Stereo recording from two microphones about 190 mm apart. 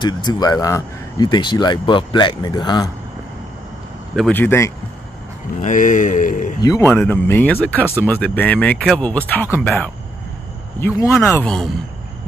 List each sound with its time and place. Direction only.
0.0 s speech: 20° left (ahead or behind)
4.1 s speech: 5° left (ahead or behind)
5.6 s speech: 45° left (ahead or behind)
6.6 s speech: 15° left (ahead or behind)
11.0 s speech: 15° left (ahead or behind)